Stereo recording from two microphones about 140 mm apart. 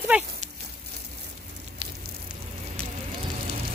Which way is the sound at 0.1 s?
10° right (ahead or behind).